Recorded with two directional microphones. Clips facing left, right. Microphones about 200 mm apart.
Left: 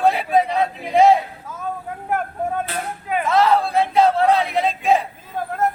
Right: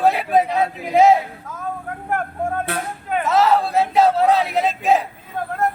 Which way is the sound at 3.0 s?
Centre (ahead or behind).